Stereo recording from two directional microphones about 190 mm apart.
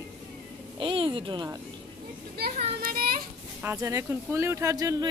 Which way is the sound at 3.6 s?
15° right (ahead or behind).